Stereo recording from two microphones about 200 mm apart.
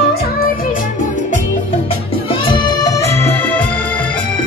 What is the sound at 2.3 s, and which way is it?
Music, 25° left (ahead or behind).